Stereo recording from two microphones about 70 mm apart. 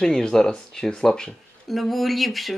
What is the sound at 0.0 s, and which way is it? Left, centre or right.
Speech, centre.